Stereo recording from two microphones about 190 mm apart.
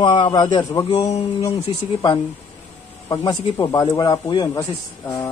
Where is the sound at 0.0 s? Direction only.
25° left (ahead or behind).